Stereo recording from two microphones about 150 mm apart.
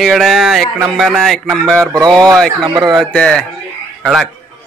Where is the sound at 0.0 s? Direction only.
Centre (ahead or behind).